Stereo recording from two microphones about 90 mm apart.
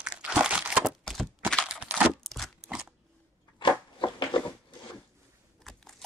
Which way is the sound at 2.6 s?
10° right (ahead or behind).